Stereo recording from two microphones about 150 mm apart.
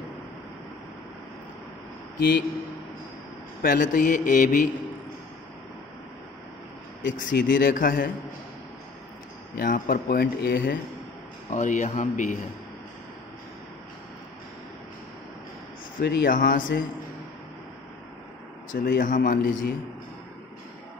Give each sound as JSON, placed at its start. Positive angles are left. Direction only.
{"t": 2.1, "sound": "a man's voice", "side_deg": 90}
{"t": 3.6, "sound": "speech", "side_deg": 65}
{"t": 7.2, "sound": "speech", "side_deg": 65}
{"t": 9.6, "sound": "speech", "side_deg": 80}
{"t": 11.5, "sound": "speech", "side_deg": 55}
{"t": 16.0, "sound": "speech", "side_deg": 80}
{"t": 18.7, "sound": "speech", "side_deg": 65}